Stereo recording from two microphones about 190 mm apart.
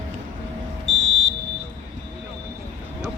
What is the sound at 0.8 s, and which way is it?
Fire alarm, 85° right.